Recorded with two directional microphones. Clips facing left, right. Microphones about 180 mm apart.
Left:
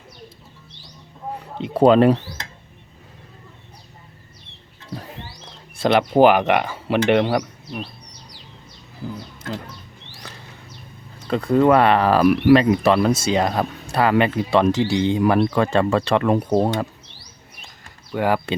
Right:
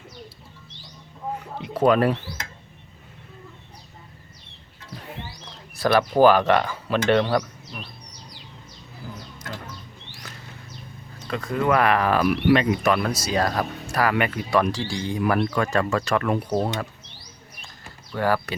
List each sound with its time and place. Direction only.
1.6 s speech: 25° left (ahead or behind)
5.8 s speech: 20° left (ahead or behind)
11.3 s speech: 30° left (ahead or behind)
18.1 s speech: 15° left (ahead or behind)